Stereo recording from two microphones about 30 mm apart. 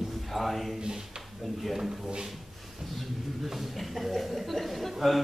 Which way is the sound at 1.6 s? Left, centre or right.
Centre.